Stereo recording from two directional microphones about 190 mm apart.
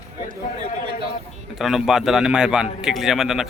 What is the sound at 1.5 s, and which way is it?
A man's voice, centre (ahead or behind).